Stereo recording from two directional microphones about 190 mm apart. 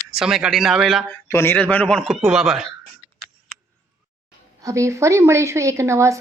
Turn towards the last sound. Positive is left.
turn(degrees=-15)  # may be behind; listen again after turning